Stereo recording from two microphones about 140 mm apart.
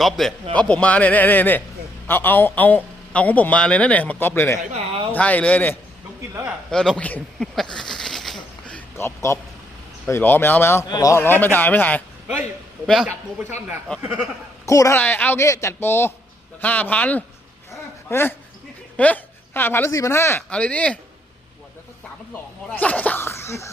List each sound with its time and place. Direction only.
0.0 s a man's voice: centre (ahead or behind)
8.6 s a sound: 15° left (ahead or behind)
10.1 s a man's voice: 15° left (ahead or behind)
10.8 s a man's voice: 25° left (ahead or behind); by 12.0 s 10° left (ahead or behind)
12.8 s a man's voice: centre (ahead or behind)
14.7 s a man's voice: 20° left (ahead or behind)
17.7 s a sound: 15° left (ahead or behind)
18.9 s a man's voice: 10° left (ahead or behind)
22.3 s speech: 10° left (ahead or behind)